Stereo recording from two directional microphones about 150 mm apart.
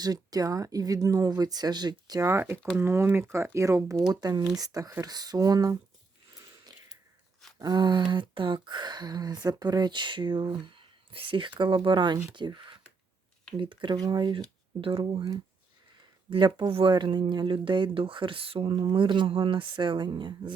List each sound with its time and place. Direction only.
0.0 s speech: 25° right (ahead or behind)
7.6 s speech: 30° right (ahead or behind)